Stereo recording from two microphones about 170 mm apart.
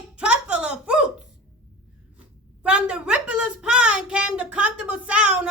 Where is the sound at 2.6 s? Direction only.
5° right (ahead or behind).